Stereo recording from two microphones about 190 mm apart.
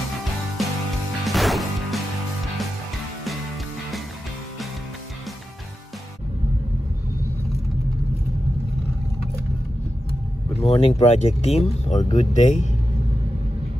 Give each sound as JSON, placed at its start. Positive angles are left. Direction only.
{"t": 1.2, "sound": "music", "side_deg": 0}
{"t": 10.6, "sound": "speech", "side_deg": 35}